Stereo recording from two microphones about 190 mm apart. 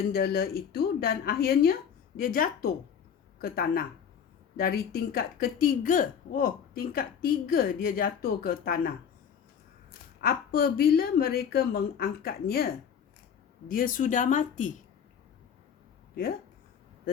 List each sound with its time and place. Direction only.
0.1 s speech: 55° left (ahead or behind)
10.2 s speech: 55° left (ahead or behind)
13.7 s speech: 50° left (ahead or behind)